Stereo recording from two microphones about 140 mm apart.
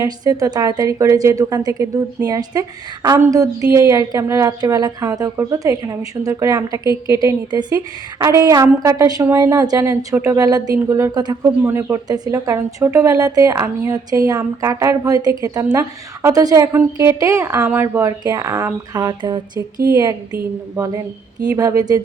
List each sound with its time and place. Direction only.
0.0 s a woman's voice: 25° right (ahead or behind)